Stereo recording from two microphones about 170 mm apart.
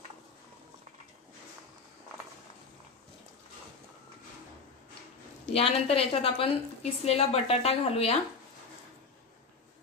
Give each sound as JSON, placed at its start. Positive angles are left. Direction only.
{"t": 5.5, "sound": "a woman's voice", "side_deg": 35}